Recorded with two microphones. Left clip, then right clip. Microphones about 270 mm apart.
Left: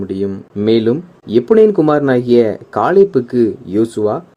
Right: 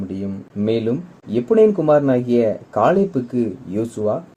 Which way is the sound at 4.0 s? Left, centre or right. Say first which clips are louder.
Left 3 dB; left.